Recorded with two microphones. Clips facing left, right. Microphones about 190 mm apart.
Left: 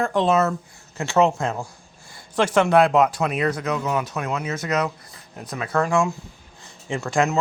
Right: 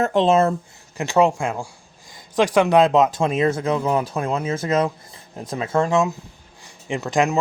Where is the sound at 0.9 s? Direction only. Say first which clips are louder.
Right 1 dB; 15° right (ahead or behind).